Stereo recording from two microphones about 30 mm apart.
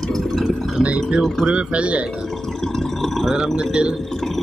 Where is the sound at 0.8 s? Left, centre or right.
Right.